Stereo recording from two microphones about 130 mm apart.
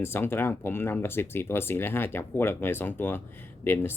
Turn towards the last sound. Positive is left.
turn(degrees=15)  # may be behind; listen again after turning